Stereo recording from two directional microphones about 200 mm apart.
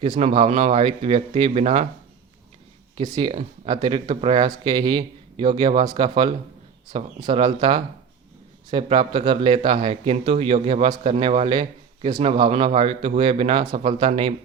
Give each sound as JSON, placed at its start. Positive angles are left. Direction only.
{"t": 0.0, "sound": "speech", "side_deg": -30}
{"t": 2.9, "sound": "speech", "side_deg": -20}